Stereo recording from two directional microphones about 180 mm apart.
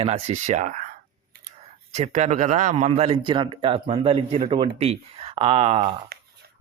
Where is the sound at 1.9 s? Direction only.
40° right (ahead or behind).